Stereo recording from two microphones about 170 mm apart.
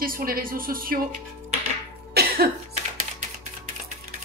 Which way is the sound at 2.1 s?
70° right (ahead or behind).